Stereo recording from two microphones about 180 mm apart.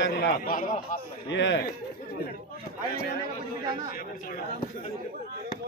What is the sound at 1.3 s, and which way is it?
Speech, 85° left.